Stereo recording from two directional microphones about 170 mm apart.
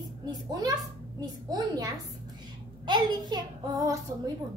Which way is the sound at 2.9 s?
25° right (ahead or behind).